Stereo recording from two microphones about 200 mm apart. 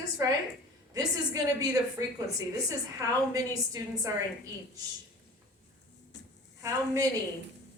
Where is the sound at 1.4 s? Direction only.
15° right (ahead or behind).